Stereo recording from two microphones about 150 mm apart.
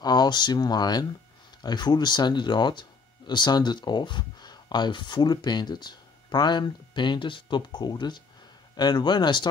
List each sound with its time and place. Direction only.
0.0 s speech: 25° left (ahead or behind)